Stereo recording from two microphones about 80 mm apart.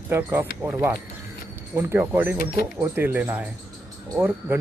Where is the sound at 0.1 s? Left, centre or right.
Right.